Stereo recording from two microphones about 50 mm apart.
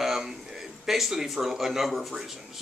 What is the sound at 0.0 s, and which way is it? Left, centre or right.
Speech, centre.